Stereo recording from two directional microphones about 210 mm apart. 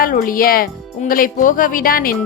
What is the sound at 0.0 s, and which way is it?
Speech, 40° left (ahead or behind).